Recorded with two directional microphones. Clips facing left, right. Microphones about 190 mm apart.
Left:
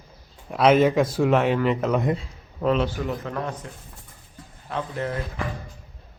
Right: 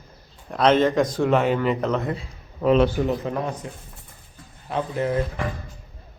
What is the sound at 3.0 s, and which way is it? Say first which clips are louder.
Speech: right 4 dB; 15° right (ahead or behind).